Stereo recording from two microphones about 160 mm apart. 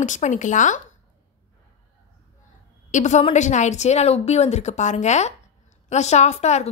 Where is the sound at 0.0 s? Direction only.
50° left (ahead or behind).